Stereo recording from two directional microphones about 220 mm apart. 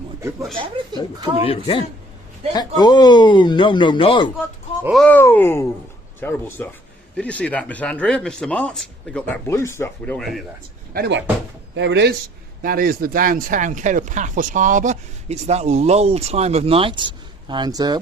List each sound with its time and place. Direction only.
0.2 s speech: 15° right (ahead or behind)
1.5 s speech: 25° left (ahead or behind)
4.8 s speech: centre (ahead or behind)
10.9 s speech: 45° right (ahead or behind)
12.6 s speech: 40° right (ahead or behind); by 18.0 s 20° right (ahead or behind)